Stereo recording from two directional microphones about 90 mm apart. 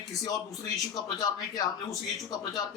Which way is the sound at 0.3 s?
40° left (ahead or behind).